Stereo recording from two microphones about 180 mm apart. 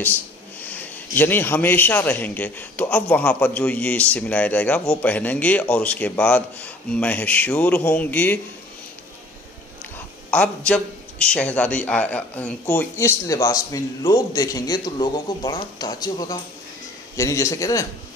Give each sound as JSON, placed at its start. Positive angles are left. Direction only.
{"t": 0.0, "sound": "a man's voice", "side_deg": 10}
{"t": 10.3, "sound": "a man's voice", "side_deg": 5}